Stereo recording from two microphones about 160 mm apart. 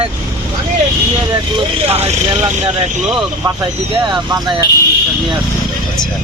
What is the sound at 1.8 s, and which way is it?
Speech, 40° right (ahead or behind).